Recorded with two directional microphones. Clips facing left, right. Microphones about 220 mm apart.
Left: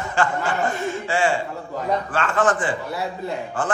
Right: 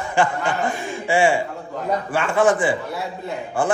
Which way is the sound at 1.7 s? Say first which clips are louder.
Even; centre (ahead or behind).